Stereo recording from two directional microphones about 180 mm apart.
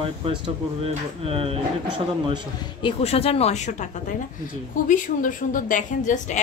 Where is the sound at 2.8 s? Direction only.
35° left (ahead or behind).